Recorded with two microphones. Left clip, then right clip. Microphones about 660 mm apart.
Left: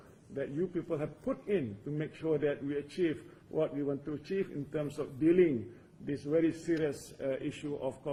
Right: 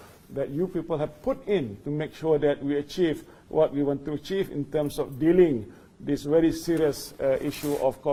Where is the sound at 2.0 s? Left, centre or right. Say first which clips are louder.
Right 9 dB; right.